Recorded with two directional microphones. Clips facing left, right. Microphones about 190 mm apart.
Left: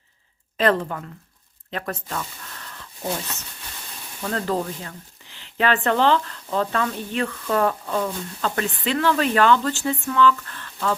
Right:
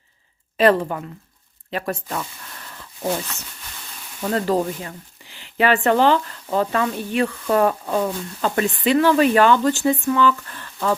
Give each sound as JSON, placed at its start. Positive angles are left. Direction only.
{"t": 0.5, "sound": "speech", "side_deg": -10}
{"t": 4.2, "sound": "speech", "side_deg": -15}